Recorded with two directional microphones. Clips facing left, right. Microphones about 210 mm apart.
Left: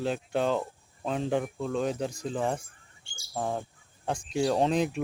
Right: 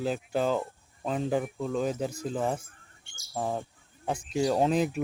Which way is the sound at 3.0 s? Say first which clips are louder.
Left 3 dB; 30° left (ahead or behind).